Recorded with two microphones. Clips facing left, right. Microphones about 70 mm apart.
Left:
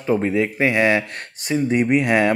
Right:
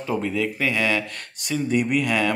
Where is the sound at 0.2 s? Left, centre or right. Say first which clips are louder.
Left 5 dB; left.